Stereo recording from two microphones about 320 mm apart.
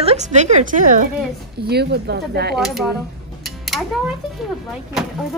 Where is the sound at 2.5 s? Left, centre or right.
Centre.